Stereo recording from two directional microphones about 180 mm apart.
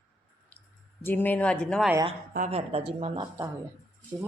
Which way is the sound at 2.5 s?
35° right (ahead or behind).